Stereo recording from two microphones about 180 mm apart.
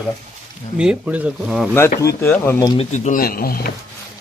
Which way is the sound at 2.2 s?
10° left (ahead or behind).